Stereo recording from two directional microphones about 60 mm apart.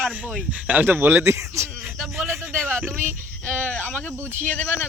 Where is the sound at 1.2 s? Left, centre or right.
Right.